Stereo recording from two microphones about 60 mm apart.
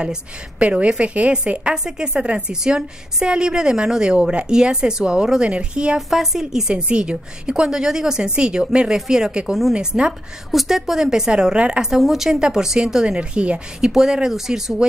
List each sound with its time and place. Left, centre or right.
0.0 s a woman's voice: centre
5.9 s a woman's voice: centre
6.8 s a woman's voice: centre
11.9 s a woman's voice: centre